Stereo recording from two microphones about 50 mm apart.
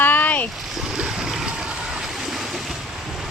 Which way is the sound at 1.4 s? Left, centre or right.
Centre.